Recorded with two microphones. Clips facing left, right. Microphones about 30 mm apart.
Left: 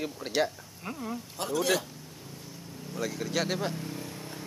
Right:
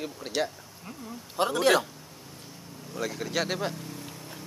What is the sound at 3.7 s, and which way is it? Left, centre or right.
Speech, centre.